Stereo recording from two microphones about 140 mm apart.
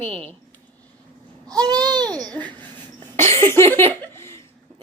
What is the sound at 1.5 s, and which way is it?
Babbling, 30° right (ahead or behind).